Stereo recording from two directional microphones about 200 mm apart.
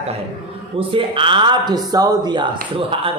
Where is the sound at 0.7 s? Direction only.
25° right (ahead or behind).